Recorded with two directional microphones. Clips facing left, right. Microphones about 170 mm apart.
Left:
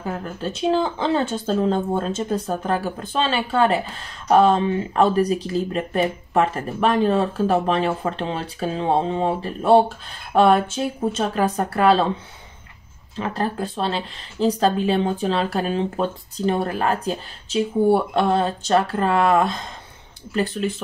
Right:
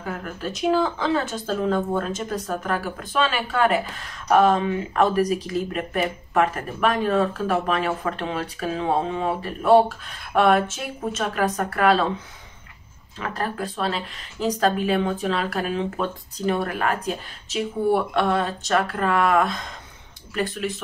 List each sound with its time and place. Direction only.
0.0 s speech: 30° left (ahead or behind)
13.2 s speech: 30° left (ahead or behind)